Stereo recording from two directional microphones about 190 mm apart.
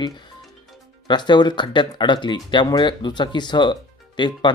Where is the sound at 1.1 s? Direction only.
25° left (ahead or behind).